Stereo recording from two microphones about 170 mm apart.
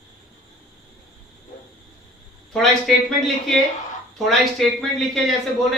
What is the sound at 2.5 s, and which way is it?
Speech, centre (ahead or behind).